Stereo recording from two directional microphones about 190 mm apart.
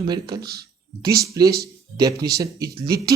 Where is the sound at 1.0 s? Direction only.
20° right (ahead or behind).